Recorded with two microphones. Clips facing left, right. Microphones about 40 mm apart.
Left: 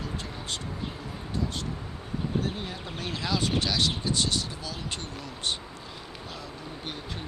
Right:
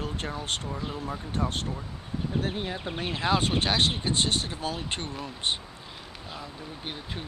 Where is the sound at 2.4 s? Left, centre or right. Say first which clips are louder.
Right 3 dB; right.